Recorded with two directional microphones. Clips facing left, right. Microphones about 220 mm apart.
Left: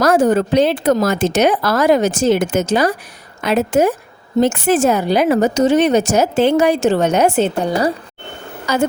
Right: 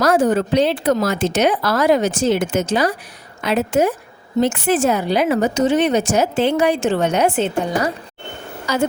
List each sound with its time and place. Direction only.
0.0 s speech: 45° left (ahead or behind)
8.7 s a woman's voice: 55° left (ahead or behind)